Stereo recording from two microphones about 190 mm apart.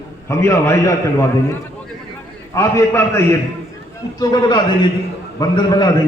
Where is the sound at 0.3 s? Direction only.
15° left (ahead or behind).